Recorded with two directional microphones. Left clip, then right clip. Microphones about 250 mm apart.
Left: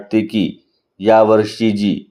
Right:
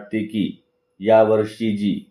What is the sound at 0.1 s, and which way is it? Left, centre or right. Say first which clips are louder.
Speech: left 8 dB; left.